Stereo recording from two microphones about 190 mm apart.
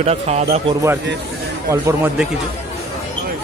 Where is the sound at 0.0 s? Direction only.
35° right (ahead or behind).